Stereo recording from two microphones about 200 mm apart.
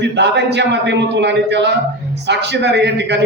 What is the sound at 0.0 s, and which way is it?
A man's voice, 60° right (ahead or behind).